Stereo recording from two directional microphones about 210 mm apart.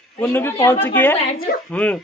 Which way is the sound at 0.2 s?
10° left (ahead or behind).